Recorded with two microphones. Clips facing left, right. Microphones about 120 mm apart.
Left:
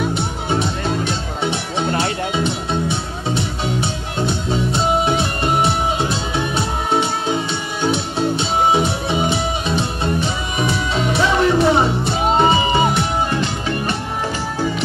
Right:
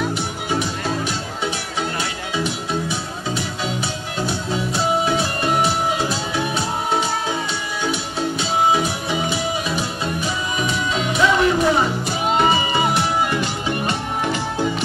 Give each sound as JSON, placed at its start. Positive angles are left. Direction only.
{"t": 0.1, "sound": "music", "side_deg": 25}